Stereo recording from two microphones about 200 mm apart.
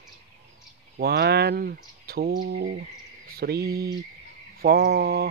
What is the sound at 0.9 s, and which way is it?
Speech, 50° right (ahead or behind).